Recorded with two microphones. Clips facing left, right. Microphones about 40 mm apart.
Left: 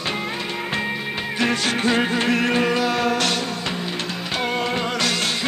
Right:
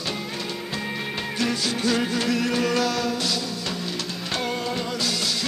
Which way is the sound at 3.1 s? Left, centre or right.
Left.